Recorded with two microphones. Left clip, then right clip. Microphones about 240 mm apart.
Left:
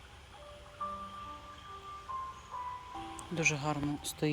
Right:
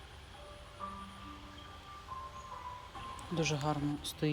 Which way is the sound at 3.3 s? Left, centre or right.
Centre.